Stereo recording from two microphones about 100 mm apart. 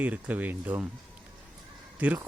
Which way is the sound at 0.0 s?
15° right (ahead or behind).